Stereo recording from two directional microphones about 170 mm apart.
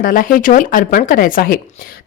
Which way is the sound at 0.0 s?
55° left (ahead or behind).